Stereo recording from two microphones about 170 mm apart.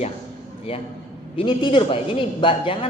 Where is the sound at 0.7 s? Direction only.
35° left (ahead or behind).